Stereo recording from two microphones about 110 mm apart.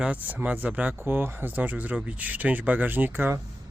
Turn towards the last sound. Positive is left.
turn(degrees=-20)  # may be behind; listen again after turning